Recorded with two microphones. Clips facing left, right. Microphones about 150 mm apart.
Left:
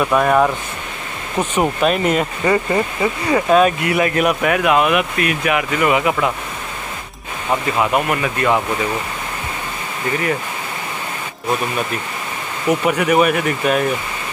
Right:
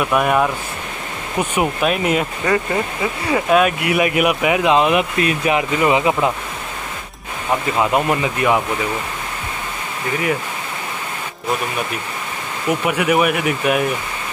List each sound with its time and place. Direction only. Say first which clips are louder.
0.1 s speech: left 1 dB; 10° right (ahead or behind)
1.4 s speech: left 2 dB; 10° right (ahead or behind); by 6.3 s 25° right (ahead or behind)
7.8 s speech: right 2 dB; 20° right (ahead or behind)
12.8 s speech: left 1 dB; 5° right (ahead or behind)